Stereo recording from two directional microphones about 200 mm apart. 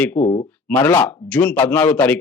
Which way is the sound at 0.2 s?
30° left (ahead or behind).